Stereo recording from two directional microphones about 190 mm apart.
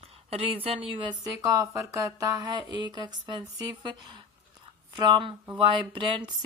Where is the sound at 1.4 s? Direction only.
15° right (ahead or behind).